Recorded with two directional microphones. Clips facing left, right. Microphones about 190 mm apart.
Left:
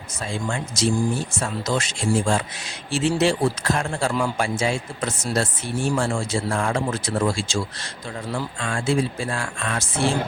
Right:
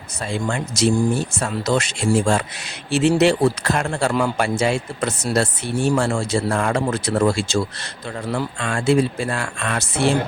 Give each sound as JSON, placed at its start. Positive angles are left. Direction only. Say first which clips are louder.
{"t": 0.3, "sound": "speech", "louder": "right 4 dB", "side_deg": -65}